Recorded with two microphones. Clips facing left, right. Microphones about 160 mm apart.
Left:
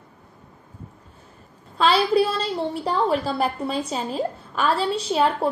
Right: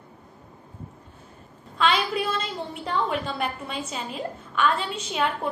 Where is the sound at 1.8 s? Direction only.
35° left (ahead or behind).